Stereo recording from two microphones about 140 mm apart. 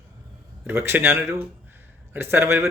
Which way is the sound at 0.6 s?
15° right (ahead or behind).